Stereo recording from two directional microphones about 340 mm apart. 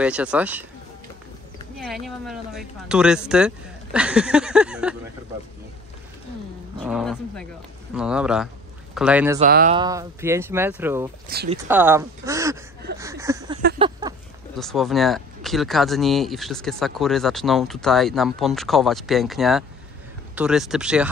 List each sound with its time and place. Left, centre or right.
0.0 s speech: centre
1.8 s speech: centre
6.8 s speech: centre
9.4 s speech: right
9.8 s speech: centre
11.2 s speech: right
11.6 s speech: centre
13.0 s a sound: centre
14.6 s speech: centre